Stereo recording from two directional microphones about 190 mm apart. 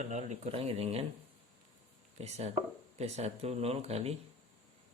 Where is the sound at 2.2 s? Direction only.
35° right (ahead or behind).